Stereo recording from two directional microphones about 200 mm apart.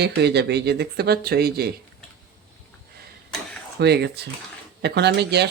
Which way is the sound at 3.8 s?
55° right (ahead or behind).